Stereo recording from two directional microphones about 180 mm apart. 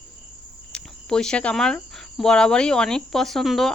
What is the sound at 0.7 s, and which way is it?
Speech, 5° left (ahead or behind).